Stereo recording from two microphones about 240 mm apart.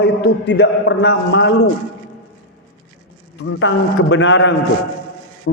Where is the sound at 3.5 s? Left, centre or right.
Left.